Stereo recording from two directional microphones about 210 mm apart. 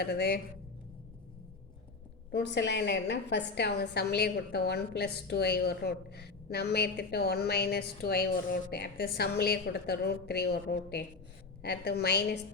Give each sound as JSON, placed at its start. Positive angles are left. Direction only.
{"t": 0.0, "sound": "a woman's voice", "side_deg": 50}
{"t": 2.3, "sound": "a woman's voice", "side_deg": 55}